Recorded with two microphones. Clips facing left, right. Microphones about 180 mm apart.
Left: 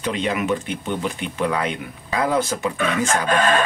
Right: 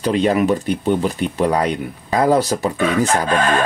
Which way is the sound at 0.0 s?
40° right (ahead or behind).